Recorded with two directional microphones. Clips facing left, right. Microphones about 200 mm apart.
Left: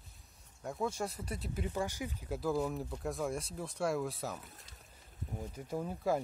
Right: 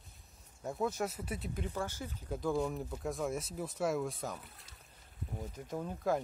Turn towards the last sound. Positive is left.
turn(degrees=5)  # may be behind; listen again after turning